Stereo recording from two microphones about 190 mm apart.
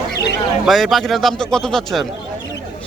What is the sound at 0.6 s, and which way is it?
Speech, centre (ahead or behind).